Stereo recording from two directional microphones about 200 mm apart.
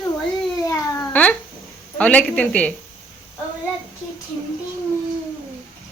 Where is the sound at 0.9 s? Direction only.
10° left (ahead or behind).